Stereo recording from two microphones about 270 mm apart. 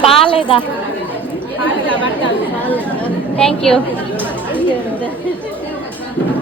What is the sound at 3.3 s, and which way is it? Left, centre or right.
Speech, centre.